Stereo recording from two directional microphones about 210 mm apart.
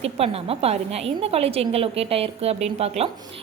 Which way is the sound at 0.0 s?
30° right (ahead or behind).